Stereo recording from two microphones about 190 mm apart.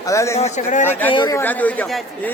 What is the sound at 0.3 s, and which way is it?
Speech, 35° left (ahead or behind).